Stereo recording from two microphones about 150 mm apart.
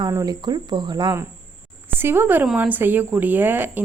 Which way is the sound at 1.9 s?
15° right (ahead or behind).